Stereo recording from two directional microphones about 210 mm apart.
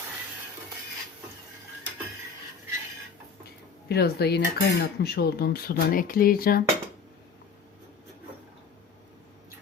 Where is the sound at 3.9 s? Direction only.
50° left (ahead or behind).